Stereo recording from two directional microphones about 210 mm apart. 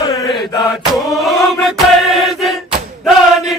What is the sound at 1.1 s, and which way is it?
Music, centre (ahead or behind).